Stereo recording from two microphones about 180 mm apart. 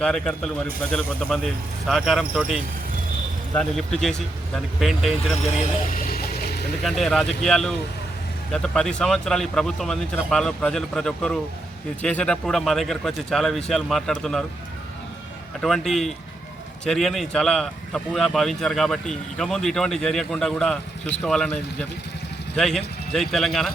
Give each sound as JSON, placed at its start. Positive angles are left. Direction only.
{"t": 0.0, "sound": "speech", "side_deg": 5}
{"t": 5.3, "sound": "speech", "side_deg": 35}
{"t": 5.9, "sound": "vehicle", "side_deg": 55}
{"t": 6.8, "sound": "speech", "side_deg": 0}
{"t": 15.6, "sound": "speech", "side_deg": 0}